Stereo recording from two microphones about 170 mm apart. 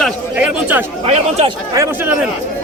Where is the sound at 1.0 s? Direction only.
35° right (ahead or behind).